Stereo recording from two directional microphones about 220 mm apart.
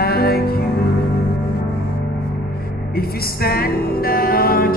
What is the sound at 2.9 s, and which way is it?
Music, 45° left (ahead or behind).